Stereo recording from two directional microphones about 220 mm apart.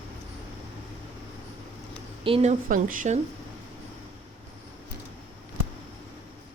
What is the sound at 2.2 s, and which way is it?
Speech, 25° right (ahead or behind).